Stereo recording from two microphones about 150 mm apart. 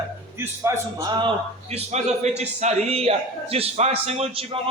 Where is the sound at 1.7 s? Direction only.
45° right (ahead or behind).